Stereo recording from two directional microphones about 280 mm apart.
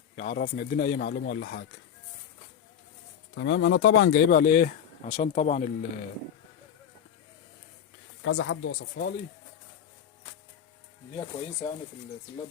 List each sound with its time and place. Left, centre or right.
0.2 s speech: left
3.3 s speech: left
8.2 s speech: left
11.2 s speech: centre